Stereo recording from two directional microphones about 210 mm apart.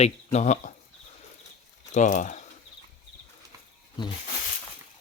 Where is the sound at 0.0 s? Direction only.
30° left (ahead or behind).